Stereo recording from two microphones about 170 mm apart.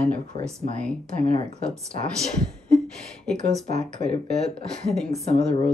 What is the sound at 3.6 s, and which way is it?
Speech, 45° right (ahead or behind).